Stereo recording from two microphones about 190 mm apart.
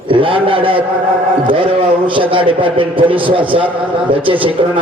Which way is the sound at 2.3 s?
25° right (ahead or behind).